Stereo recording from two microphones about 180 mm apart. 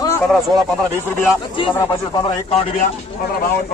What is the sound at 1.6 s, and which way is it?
Speech, 25° left (ahead or behind).